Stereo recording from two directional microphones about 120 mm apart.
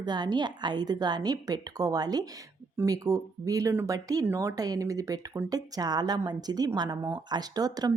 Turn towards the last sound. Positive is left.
turn(degrees=-30)  # may be behind; listen again after turning